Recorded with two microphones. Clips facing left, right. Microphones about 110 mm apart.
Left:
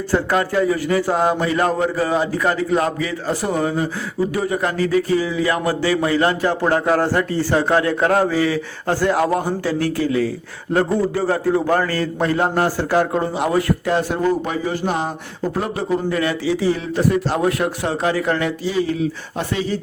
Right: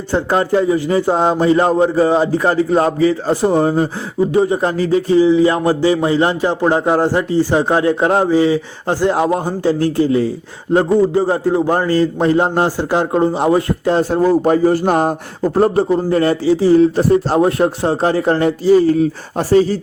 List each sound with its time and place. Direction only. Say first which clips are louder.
0.1 s a sound: right 4 dB; 25° right (ahead or behind)
14.4 s mantra: right 9 dB; 45° right (ahead or behind)
15.5 s a man's voice: right 9 dB; 40° right (ahead or behind)